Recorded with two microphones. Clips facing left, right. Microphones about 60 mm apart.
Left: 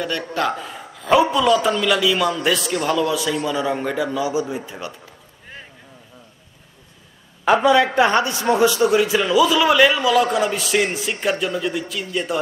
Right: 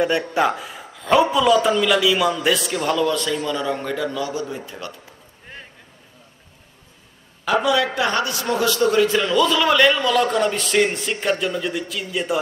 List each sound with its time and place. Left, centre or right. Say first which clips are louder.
0.0 s speech: right 4 dB; centre
0.7 s a man's voice: left 1 dB; centre
7.4 s a man's voice: left 4 dB; left; by 12.4 s centre